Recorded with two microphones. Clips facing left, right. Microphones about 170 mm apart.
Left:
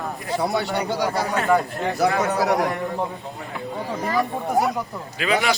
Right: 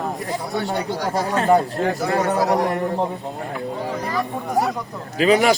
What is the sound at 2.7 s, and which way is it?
Speech, 30° right (ahead or behind).